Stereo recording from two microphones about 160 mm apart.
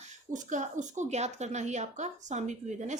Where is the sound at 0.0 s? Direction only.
50° right (ahead or behind).